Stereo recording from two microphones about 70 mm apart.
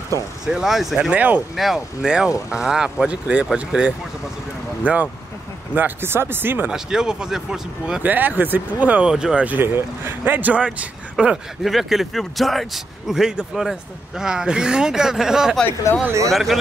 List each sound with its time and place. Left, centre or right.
0.5 s a man's voice: centre
1.1 s speech: right
1.6 s speech: centre; by 6.7 s right
6.7 s speech: centre
8.0 s speech: right
9.0 s speech: centre
9.8 s speech: right; by 11.3 s centre
11.6 s a man's voice: centre